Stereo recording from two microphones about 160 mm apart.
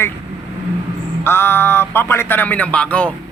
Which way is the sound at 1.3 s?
15° left (ahead or behind).